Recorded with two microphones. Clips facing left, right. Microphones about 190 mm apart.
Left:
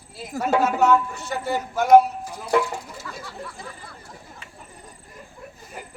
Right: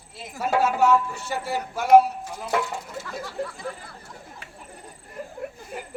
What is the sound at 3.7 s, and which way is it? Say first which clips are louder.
Speech: right 7 dB; 60° right (ahead or behind).